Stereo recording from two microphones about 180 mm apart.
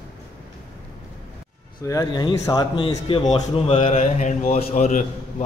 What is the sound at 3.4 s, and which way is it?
A man's voice, 35° left (ahead or behind).